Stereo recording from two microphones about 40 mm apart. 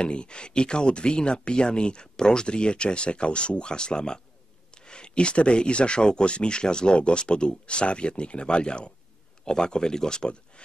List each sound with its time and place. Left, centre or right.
0.0 s speech: left